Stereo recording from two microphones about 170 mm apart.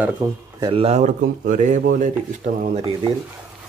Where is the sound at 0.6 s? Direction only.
30° right (ahead or behind); by 2.1 s 50° right (ahead or behind).